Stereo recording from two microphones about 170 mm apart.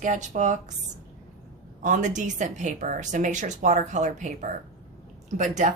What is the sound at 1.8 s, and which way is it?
Speech, 45° right (ahead or behind).